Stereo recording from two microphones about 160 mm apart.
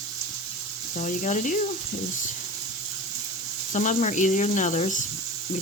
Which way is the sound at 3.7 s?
50° left (ahead or behind).